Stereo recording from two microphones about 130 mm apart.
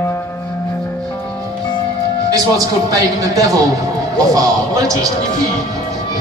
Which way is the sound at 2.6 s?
25° right (ahead or behind).